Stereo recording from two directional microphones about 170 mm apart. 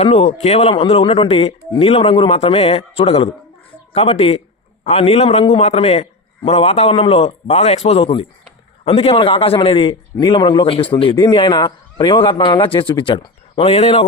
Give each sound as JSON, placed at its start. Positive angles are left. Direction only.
{"t": 0.0, "sound": "a man's voice", "side_deg": 35}